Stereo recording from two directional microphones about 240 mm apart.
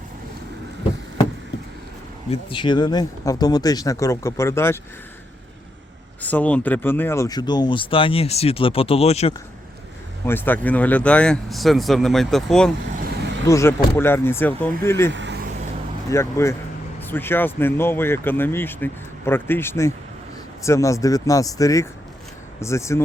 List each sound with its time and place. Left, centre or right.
2.3 s speech: left
6.2 s speech: centre; by 9.3 s left
10.2 s speech: centre
15.1 s vehicle: right
16.0 s speech: centre